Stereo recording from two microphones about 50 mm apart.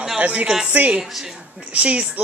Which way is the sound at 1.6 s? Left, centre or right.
Right.